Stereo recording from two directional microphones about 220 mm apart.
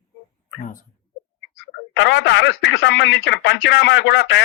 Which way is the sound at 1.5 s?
55° left (ahead or behind).